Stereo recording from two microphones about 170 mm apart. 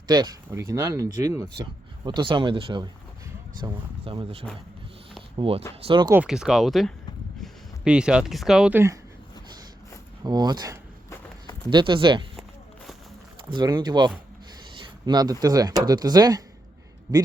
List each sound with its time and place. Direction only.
0.1 s speech: 25° right (ahead or behind)
6.2 s speech: 5° right (ahead or behind)
10.2 s speech: 25° right (ahead or behind)
12.4 s a sound: centre (ahead or behind)
13.5 s speech: 25° right (ahead or behind)